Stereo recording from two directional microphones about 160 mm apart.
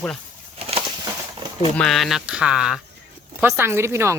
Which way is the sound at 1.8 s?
Centre (ahead or behind).